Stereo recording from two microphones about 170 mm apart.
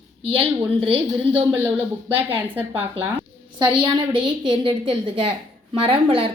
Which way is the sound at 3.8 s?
30° right (ahead or behind).